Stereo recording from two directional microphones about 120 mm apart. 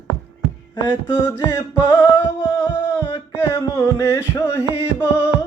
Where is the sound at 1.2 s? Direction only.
25° left (ahead or behind).